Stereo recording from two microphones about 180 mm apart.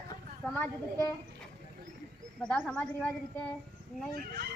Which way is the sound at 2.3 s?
5° left (ahead or behind).